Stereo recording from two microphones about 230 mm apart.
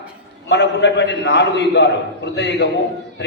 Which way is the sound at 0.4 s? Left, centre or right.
Left.